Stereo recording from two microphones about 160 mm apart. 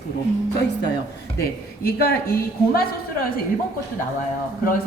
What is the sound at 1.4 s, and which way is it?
A woman's voice, 75° left (ahead or behind).